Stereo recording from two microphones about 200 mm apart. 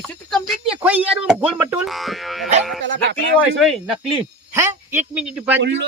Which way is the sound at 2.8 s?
65° right (ahead or behind).